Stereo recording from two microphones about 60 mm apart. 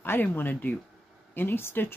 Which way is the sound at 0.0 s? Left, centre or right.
Left.